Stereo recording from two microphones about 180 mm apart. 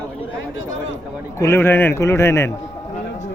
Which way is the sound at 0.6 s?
90° left.